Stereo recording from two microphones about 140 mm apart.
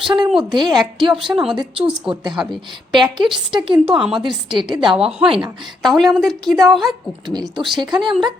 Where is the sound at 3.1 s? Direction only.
35° right (ahead or behind).